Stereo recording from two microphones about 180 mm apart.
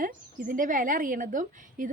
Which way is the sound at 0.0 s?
50° right (ahead or behind).